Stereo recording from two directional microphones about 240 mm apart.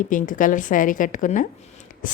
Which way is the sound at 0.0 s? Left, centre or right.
Left.